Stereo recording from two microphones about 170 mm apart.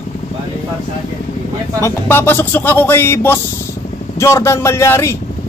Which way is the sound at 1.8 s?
15° left (ahead or behind).